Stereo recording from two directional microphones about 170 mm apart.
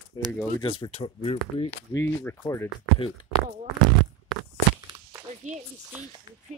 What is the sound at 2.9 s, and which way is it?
Speech, 30° left (ahead or behind).